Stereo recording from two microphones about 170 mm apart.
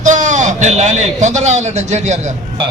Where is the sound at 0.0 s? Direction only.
45° right (ahead or behind).